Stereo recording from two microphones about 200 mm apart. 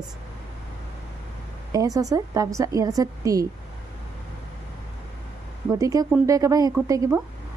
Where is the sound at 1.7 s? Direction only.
15° right (ahead or behind).